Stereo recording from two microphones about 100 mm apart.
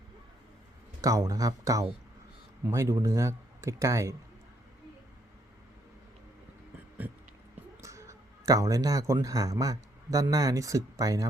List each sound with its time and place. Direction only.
1.0 s speech: 35° right (ahead or behind)
7.0 s music: 15° right (ahead or behind)
7.8 s speech: 30° right (ahead or behind)